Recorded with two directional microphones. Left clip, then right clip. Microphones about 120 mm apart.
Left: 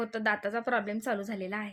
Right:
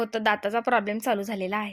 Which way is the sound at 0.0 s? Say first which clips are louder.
Right 6 dB; 20° right (ahead or behind).